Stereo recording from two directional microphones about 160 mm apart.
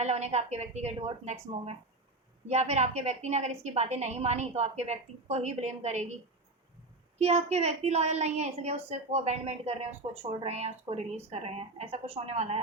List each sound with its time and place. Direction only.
0.0 s a woman's voice: 45° right (ahead or behind)
7.2 s a woman's voice: 40° right (ahead or behind)